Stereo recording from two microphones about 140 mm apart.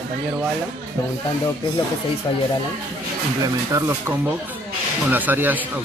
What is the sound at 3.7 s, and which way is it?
Speech, 15° right (ahead or behind).